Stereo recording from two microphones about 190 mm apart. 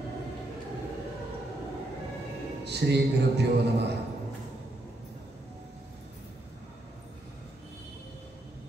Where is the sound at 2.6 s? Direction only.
60° right (ahead or behind).